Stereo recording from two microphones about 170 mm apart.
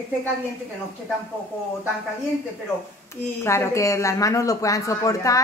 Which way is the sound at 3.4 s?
15° left (ahead or behind).